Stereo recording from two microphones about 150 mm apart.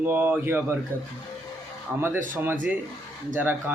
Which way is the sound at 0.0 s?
15° right (ahead or behind).